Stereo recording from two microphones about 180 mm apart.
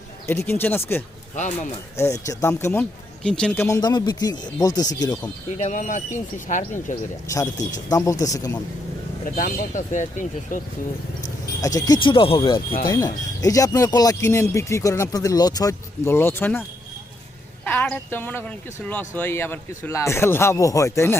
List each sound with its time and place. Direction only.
0.3 s speech: 15° left (ahead or behind)
2.0 s speech: 15° left (ahead or behind)
5.5 s speech: 40° left (ahead or behind)
7.3 s speech: 20° left (ahead or behind)
9.2 s speech: 50° left (ahead or behind)
11.6 s speech: 20° left (ahead or behind)
17.7 s speech: 5° left (ahead or behind)